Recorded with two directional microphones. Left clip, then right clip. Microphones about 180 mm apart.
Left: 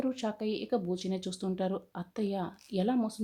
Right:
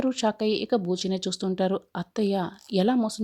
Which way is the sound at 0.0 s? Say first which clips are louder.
Right 9 dB; 40° right (ahead or behind).